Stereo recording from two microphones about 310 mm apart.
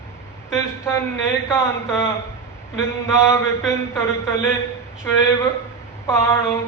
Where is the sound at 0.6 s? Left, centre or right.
Centre.